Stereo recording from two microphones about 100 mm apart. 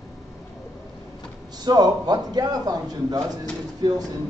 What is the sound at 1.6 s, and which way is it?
A man's voice, 40° right (ahead or behind).